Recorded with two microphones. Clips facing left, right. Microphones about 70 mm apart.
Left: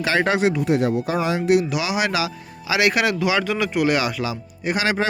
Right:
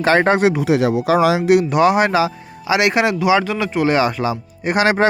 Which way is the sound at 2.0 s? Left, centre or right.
Right.